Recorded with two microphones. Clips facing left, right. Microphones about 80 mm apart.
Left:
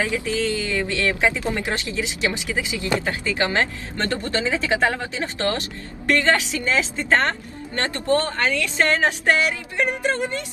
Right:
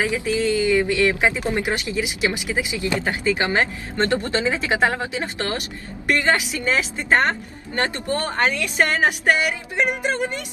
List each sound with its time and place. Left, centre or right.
0.0 s a woman's voice: right